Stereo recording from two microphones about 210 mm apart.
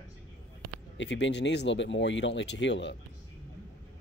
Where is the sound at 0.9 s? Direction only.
60° left (ahead or behind).